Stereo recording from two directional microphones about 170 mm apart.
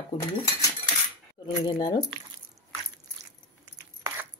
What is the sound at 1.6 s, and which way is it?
Speech, 25° left (ahead or behind).